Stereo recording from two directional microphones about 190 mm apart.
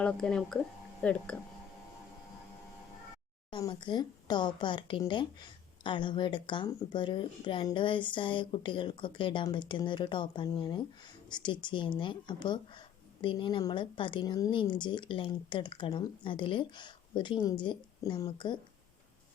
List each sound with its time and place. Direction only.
0.0 s speech: 5° left (ahead or behind)
3.5 s speech: 25° left (ahead or behind)